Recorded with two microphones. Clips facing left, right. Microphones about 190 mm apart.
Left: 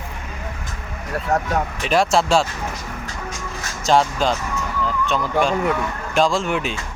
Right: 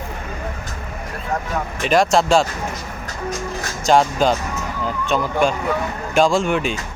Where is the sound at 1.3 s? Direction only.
45° left (ahead or behind).